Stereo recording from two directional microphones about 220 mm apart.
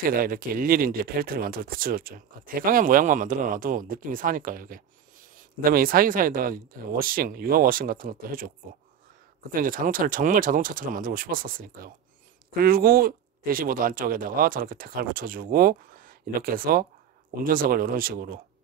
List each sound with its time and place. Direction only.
0.1 s speech: 40° right (ahead or behind)
9.5 s speech: 40° right (ahead or behind)